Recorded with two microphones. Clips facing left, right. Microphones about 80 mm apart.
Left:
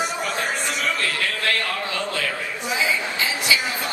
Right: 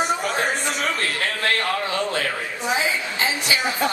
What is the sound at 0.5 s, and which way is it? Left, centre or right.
Speech, right.